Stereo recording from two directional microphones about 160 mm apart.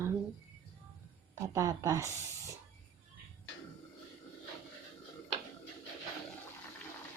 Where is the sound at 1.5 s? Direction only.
20° right (ahead or behind).